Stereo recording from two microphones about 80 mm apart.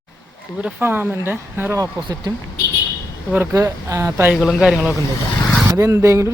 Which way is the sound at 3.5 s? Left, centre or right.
Right.